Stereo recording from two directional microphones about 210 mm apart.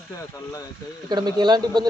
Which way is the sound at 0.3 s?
15° left (ahead or behind).